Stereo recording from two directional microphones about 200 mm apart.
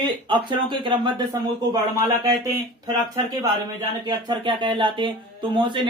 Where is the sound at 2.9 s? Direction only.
20° right (ahead or behind).